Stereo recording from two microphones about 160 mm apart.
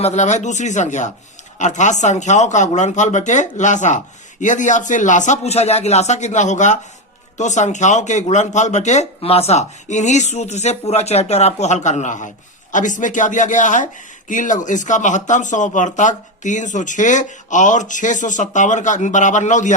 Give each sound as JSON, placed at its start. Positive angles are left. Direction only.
{"t": 0.0, "sound": "speech", "side_deg": 45}